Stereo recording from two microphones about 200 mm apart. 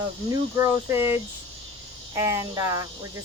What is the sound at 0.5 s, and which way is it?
Speech, 15° right (ahead or behind).